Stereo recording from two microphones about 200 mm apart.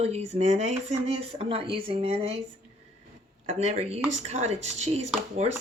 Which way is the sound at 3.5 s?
35° right (ahead or behind).